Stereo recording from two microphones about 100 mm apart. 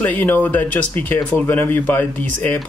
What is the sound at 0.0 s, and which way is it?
Speech, 20° left (ahead or behind).